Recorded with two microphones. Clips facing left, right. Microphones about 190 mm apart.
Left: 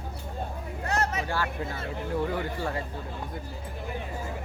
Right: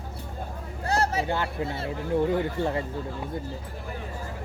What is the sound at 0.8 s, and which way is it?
Hubbub, 30° right (ahead or behind).